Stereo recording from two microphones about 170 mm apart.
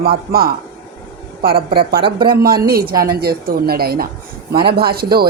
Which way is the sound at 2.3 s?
60° right (ahead or behind).